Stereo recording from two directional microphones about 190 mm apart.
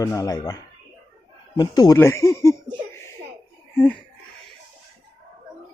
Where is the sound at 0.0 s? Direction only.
20° left (ahead or behind).